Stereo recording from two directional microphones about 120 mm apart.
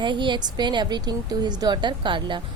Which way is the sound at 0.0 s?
40° right (ahead or behind).